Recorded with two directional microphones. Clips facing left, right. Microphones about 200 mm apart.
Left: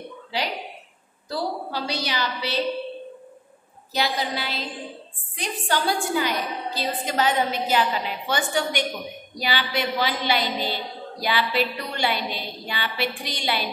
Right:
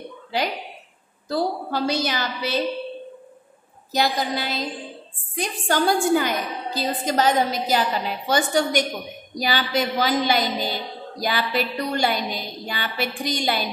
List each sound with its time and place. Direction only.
1.3 s a woman's voice: 50° right (ahead or behind)
3.9 s a woman's voice: 45° right (ahead or behind)